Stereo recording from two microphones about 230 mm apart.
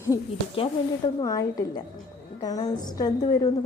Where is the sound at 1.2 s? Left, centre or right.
Centre.